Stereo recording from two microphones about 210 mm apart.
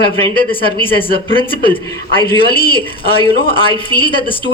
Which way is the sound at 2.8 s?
25° left (ahead or behind).